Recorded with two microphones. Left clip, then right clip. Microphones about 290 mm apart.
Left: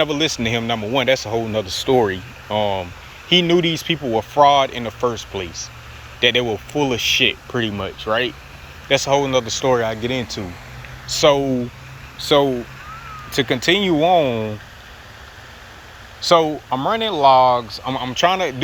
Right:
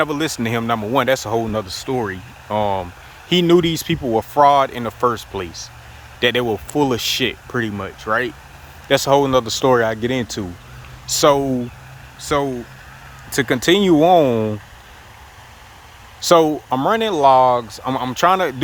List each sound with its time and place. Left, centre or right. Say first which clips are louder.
0.0 s speech: left 1 dB; centre
16.2 s speech: right 2 dB; right